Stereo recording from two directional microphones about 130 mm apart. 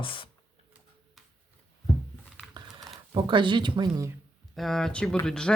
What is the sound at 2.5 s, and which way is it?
Typing, 30° right (ahead or behind).